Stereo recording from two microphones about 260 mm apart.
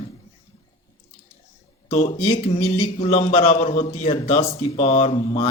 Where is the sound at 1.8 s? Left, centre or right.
Left.